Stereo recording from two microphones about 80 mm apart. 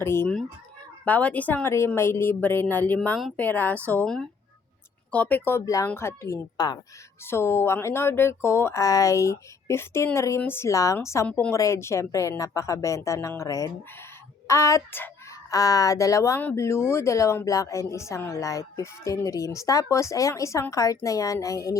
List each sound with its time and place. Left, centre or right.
0.0 s speech: left
1.0 s a woman's voice: centre
2.0 s a woman's voice: left
4.0 s speech: centre
5.1 s a woman's voice: centre
5.6 s speech: left
5.9 s speech: left
10.7 s speech: left
11.3 s a woman's voice: centre
11.5 s speech: left